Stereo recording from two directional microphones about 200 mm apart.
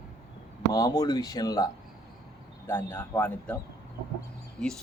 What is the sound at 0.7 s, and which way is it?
Speech, 15° left (ahead or behind).